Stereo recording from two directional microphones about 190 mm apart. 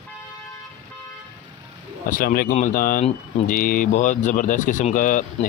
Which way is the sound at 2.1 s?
50° left (ahead or behind).